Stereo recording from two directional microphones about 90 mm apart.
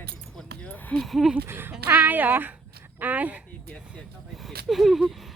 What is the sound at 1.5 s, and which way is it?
A woman's voice, 25° right (ahead or behind).